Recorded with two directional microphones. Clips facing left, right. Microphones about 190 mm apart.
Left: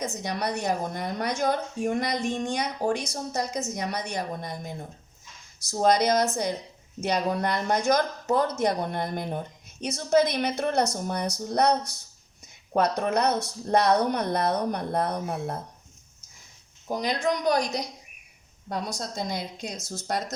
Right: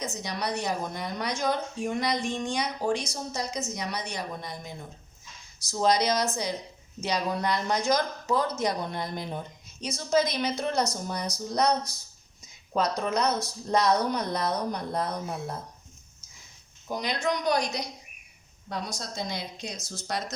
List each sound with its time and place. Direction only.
0.0 s a woman's voice: 55° left (ahead or behind)
5.8 s a woman's voice: 55° left (ahead or behind)
12.7 s speech: 60° left (ahead or behind)
16.9 s a woman's voice: 45° left (ahead or behind)